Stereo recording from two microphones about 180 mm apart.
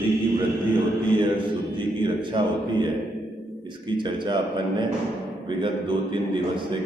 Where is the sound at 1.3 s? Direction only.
25° right (ahead or behind).